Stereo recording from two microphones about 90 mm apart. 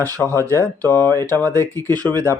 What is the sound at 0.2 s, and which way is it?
Speech, 25° left (ahead or behind).